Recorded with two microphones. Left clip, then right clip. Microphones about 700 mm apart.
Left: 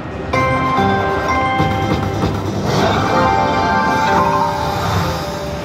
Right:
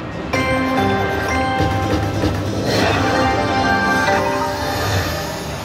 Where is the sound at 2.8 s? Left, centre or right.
Centre.